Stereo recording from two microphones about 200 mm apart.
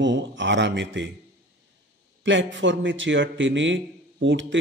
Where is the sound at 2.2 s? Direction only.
65° right (ahead or behind).